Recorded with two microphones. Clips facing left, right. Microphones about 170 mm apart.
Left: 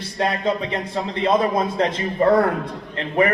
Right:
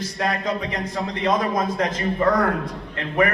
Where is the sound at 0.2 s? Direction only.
30° left (ahead or behind).